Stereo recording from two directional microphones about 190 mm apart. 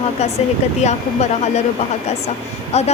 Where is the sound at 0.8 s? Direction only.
35° left (ahead or behind).